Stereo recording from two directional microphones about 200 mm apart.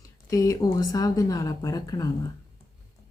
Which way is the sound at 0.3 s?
15° left (ahead or behind).